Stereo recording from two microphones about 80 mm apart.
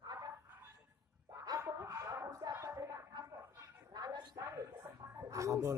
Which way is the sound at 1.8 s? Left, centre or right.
Right.